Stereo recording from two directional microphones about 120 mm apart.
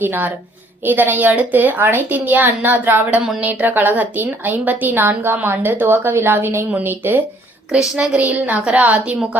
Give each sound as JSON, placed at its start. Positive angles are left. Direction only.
{"t": 0.0, "sound": "a woman's voice", "side_deg": -15}